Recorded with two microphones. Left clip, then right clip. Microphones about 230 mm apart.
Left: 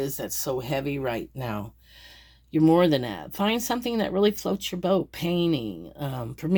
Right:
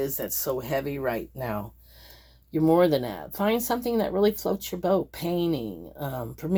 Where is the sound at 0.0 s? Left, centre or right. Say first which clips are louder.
Right 1 dB; left.